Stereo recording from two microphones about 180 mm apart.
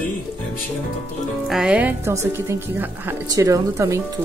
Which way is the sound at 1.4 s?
5° right (ahead or behind).